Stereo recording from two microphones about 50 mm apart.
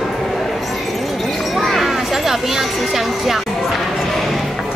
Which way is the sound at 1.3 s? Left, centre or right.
Centre.